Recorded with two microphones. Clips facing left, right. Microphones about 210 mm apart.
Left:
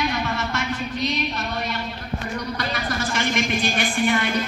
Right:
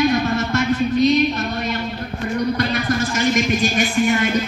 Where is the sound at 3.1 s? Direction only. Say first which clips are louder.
Right 3 dB; 45° right (ahead or behind).